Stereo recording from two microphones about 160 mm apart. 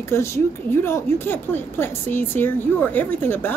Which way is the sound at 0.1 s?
15° left (ahead or behind).